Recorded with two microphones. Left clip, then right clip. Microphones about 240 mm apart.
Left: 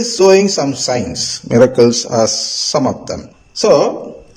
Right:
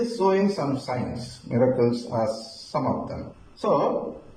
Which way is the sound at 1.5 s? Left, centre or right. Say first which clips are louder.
Left 12 dB; left.